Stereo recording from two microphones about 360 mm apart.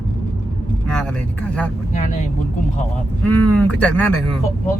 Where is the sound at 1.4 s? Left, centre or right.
Centre.